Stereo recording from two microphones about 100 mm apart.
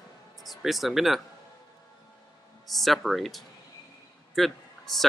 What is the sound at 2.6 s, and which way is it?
Speech, centre (ahead or behind).